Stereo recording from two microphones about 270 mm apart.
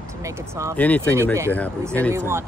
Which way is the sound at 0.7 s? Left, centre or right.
Centre.